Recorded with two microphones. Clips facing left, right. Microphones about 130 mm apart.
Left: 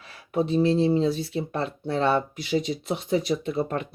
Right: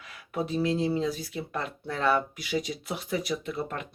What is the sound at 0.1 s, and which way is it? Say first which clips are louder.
Speech: left 6 dB; 25° left (ahead or behind).